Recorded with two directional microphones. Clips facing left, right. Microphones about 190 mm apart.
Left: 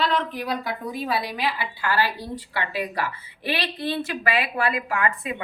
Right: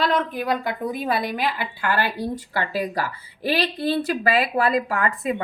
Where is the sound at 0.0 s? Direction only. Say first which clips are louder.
Right 2 dB; 45° right (ahead or behind).